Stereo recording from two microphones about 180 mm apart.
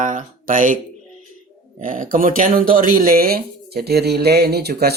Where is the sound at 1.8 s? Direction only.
50° right (ahead or behind).